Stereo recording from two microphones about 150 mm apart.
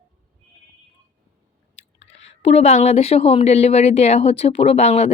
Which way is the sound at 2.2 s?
45° left (ahead or behind).